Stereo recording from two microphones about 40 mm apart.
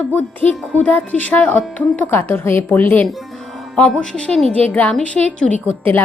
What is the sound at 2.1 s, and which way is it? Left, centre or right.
Speech, left.